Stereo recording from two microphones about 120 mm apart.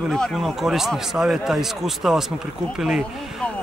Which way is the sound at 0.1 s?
5° left (ahead or behind).